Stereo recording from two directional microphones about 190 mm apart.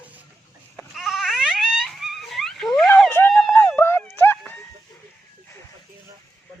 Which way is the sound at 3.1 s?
10° left (ahead or behind).